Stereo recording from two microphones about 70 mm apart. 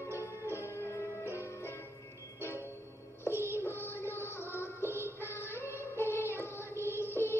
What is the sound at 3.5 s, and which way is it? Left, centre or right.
Music, left.